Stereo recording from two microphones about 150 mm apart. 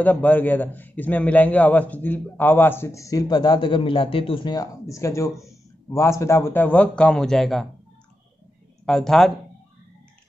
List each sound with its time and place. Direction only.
0.0 s a man's voice: 10° left (ahead or behind); by 4.6 s 35° left (ahead or behind)
4.6 s a man's voice: 20° left (ahead or behind); by 7.6 s centre (ahead or behind)
8.8 s speech: 5° left (ahead or behind)